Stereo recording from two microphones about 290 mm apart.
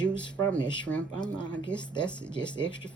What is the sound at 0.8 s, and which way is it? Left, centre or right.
Cutlery, centre.